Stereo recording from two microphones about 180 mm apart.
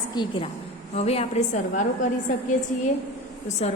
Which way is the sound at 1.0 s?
35° left (ahead or behind).